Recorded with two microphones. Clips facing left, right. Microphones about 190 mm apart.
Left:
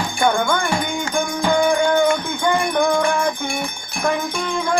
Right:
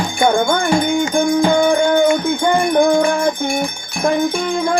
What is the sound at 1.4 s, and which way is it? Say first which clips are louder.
Music: right 3 dB; 25° right (ahead or behind).